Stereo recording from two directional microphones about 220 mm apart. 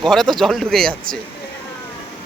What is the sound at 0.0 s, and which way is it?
Speech, centre (ahead or behind).